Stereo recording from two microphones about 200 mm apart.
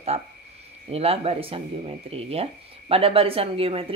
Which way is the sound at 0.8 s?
30° right (ahead or behind).